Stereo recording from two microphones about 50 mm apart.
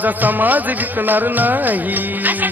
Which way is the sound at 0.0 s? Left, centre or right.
Right.